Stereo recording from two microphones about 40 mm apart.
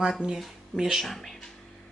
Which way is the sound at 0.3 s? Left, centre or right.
Centre.